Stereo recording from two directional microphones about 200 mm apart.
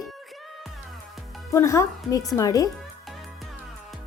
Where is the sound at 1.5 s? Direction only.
15° left (ahead or behind).